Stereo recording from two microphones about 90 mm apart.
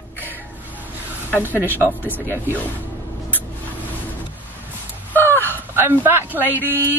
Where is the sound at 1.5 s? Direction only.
25° left (ahead or behind).